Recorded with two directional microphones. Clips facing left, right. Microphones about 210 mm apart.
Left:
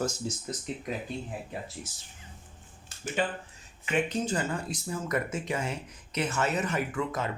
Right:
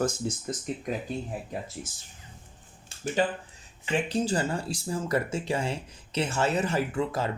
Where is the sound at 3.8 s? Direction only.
30° right (ahead or behind).